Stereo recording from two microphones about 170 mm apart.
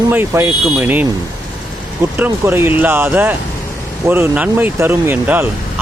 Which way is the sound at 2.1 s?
10° right (ahead or behind).